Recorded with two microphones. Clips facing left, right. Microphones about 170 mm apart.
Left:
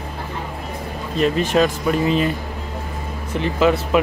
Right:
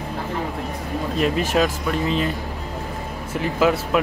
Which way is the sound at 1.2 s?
5° right (ahead or behind).